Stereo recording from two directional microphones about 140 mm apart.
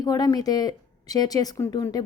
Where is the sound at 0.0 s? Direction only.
25° left (ahead or behind).